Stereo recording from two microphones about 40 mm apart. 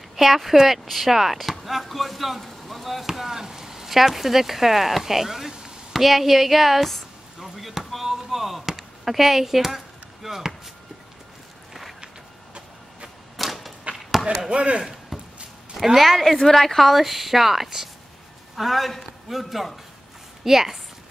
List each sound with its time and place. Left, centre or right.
0.1 s speech: centre
7.3 s a sound: centre
13.4 s typewriter: centre
14.5 s speech: right
15.1 s a sound: centre
15.7 s speech: centre